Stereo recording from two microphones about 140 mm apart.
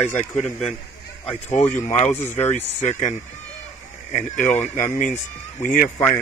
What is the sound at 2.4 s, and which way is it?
Speech, 55° left (ahead or behind).